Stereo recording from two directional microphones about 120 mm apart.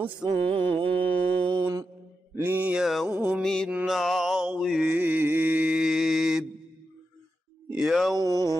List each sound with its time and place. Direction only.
0.5 s mantra: 45° right (ahead or behind)
1.0 s mantra: 15° left (ahead or behind)
1.4 s mantra: 45° right (ahead or behind)
2.3 s mantra: 15° right (ahead or behind)
3.4 s mantra: 5° left (ahead or behind)
7.7 s speech: 5° right (ahead or behind)
8.1 s a sound: 30° right (ahead or behind)